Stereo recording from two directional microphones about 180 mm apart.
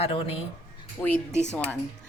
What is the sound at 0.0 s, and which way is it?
Speech, 35° left (ahead or behind).